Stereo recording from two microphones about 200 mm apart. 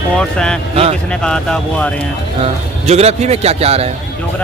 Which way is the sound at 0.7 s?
30° right (ahead or behind).